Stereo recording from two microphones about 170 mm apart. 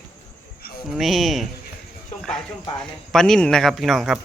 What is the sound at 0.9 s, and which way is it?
Speech, centre (ahead or behind).